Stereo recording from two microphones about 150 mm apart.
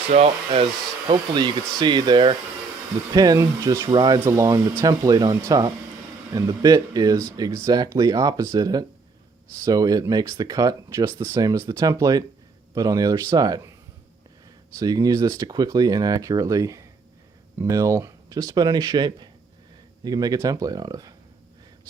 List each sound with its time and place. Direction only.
0.1 s speech: 45° right (ahead or behind); by 13.7 s 25° right (ahead or behind)
14.8 s speech: 25° right (ahead or behind)